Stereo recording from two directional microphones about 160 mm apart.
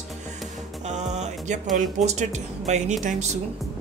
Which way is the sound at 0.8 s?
45° right (ahead or behind).